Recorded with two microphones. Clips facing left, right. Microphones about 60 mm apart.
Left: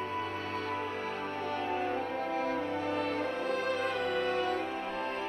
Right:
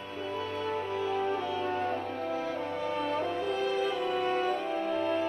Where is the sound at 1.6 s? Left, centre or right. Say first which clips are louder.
Right 1 dB; left.